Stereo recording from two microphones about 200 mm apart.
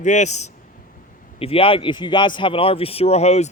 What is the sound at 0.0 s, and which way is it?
Speech, 35° left (ahead or behind).